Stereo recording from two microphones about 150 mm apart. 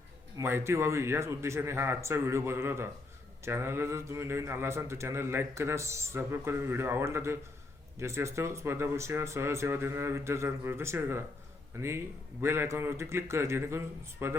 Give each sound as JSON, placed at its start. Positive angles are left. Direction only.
{"t": 0.3, "sound": "a man's voice", "side_deg": -15}